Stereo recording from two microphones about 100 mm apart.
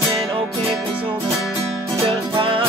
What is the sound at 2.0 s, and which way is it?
Music, 60° right (ahead or behind).